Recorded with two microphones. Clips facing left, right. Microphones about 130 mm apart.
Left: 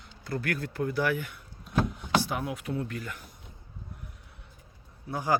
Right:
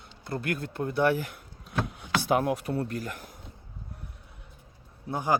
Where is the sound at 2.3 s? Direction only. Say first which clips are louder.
Right 8 dB; 60° right (ahead or behind).